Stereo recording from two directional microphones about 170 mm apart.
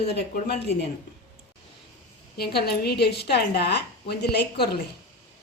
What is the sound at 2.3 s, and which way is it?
A woman's voice, 70° left (ahead or behind).